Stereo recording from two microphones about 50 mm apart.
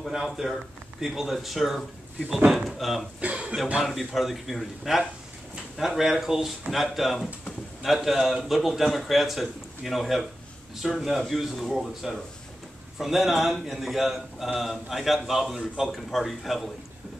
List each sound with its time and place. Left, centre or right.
0.1 s a man's voice: centre
3.2 s a sound: right
3.7 s a man's voice: centre